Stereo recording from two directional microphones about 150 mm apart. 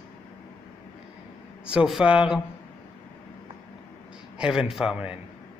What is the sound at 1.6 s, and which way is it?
Speech, 5° right (ahead or behind).